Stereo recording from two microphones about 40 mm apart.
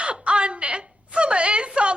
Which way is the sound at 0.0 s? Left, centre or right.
Right.